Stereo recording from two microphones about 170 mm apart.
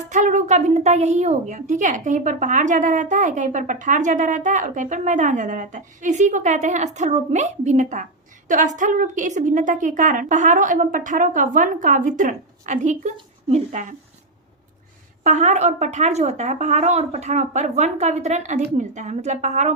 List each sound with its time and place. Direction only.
0.1 s speech: 45° right (ahead or behind)
15.2 s speech: 45° right (ahead or behind)